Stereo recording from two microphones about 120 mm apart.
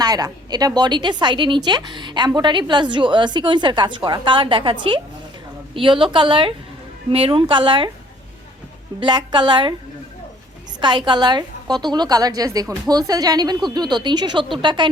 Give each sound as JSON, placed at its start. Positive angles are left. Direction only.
{"t": 0.0, "sound": "a woman's voice", "side_deg": -35}
{"t": 9.0, "sound": "a woman's voice", "side_deg": -40}
{"t": 10.8, "sound": "a woman's voice", "side_deg": -40}